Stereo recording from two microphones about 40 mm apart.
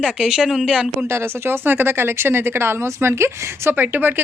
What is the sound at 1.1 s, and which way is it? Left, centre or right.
Speech, right.